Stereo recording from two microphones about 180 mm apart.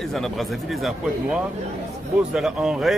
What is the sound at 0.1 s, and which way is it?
A man's voice, centre (ahead or behind).